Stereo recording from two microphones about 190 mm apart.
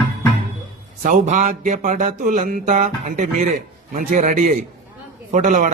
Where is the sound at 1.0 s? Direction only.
40° right (ahead or behind).